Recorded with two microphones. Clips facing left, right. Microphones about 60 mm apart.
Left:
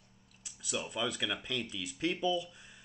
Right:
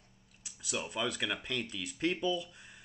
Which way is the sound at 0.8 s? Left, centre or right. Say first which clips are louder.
Right 1 dB; centre.